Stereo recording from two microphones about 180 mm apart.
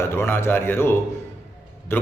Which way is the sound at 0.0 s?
15° left (ahead or behind).